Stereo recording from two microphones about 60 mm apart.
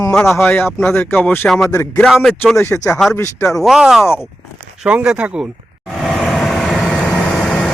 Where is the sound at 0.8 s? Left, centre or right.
Left.